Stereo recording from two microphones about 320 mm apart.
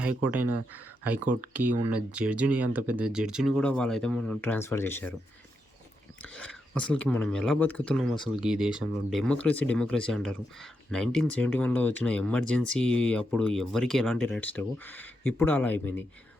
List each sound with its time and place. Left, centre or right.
0.2 s speech: centre
0.4 s speech: right
1.3 s speech: centre
6.2 s speech: centre